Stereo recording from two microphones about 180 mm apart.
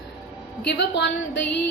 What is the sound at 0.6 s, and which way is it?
Speech, 75° left (ahead or behind).